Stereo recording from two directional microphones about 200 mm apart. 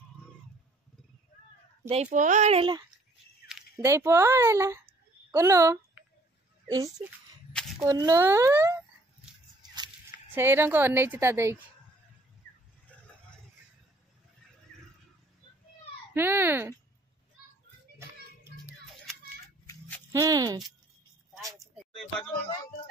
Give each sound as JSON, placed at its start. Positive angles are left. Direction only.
{"t": 1.9, "sound": "speech", "side_deg": -35}
{"t": 3.8, "sound": "a woman's voice", "side_deg": -15}
{"t": 10.3, "sound": "a woman's voice", "side_deg": -10}
{"t": 16.1, "sound": "a woman's voice", "side_deg": -10}
{"t": 20.1, "sound": "speech", "side_deg": -15}
{"t": 21.4, "sound": "a sound", "side_deg": -15}